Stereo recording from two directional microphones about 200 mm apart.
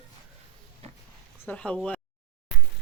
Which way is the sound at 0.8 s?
30° right (ahead or behind).